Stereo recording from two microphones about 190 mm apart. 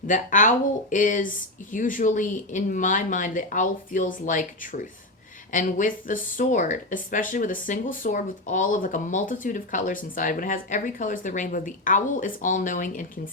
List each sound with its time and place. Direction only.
0.1 s speech: 45° left (ahead or behind)